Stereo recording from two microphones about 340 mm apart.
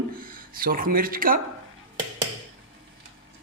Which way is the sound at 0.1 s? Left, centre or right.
Right.